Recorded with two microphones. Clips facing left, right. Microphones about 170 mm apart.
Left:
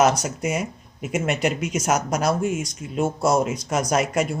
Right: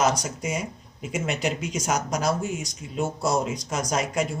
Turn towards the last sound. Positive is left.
turn(degrees=60)  # may be behind; listen again after turning